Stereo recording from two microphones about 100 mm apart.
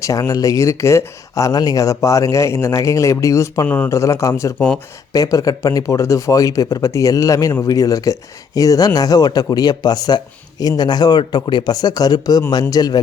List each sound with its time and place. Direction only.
0.0 s speech: 35° left (ahead or behind)